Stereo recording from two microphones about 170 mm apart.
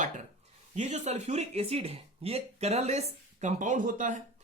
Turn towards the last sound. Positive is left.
turn(degrees=-50)  # may be behind; listen again after turning